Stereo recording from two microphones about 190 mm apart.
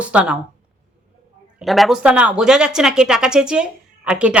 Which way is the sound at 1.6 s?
Centre (ahead or behind).